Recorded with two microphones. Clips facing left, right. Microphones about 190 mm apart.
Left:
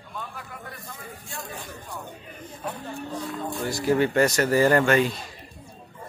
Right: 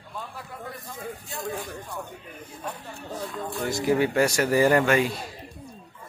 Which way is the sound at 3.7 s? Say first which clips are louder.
Left 1 dB; 15° right (ahead or behind).